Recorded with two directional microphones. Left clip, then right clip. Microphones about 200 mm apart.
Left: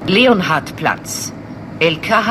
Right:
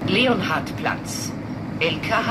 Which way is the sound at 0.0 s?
60° left (ahead or behind).